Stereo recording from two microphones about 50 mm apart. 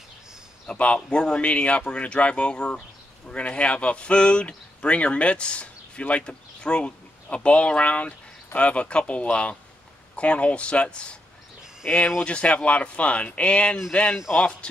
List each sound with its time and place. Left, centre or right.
0.7 s speech: left